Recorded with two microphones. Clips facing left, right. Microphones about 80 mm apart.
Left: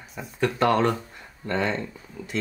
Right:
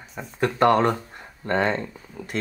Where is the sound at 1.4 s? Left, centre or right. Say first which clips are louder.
Right 3 dB; right.